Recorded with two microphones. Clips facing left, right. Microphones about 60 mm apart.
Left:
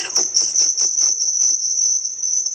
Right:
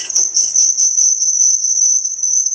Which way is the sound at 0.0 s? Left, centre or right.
Left.